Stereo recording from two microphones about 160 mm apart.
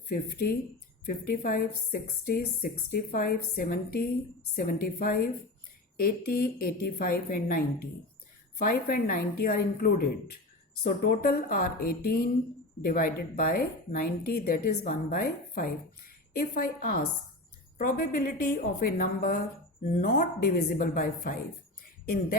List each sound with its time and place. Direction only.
0.1 s a woman's voice: 75° left (ahead or behind)